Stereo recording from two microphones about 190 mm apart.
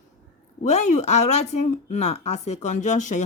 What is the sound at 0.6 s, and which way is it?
A woman's voice, 35° left (ahead or behind).